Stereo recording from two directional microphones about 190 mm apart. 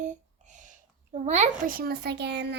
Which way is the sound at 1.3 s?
40° right (ahead or behind).